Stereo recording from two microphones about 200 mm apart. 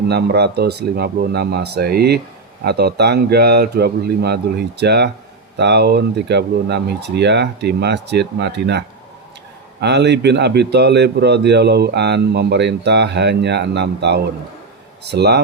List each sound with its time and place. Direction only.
0.1 s a man's voice: 55° right (ahead or behind)
9.8 s a man's voice: 60° right (ahead or behind)